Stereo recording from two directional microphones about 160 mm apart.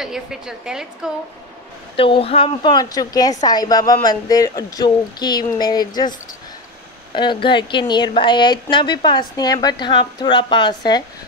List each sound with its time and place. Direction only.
0.0 s a woman's voice: 5° right (ahead or behind)
2.0 s speech: 35° left (ahead or behind)